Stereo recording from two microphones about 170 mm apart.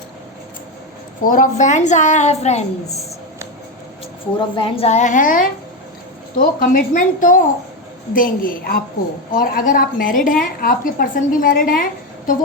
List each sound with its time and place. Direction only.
1.2 s a woman's voice: 55° left (ahead or behind)
4.4 s a woman's voice: 30° left (ahead or behind); by 12.4 s 55° left (ahead or behind)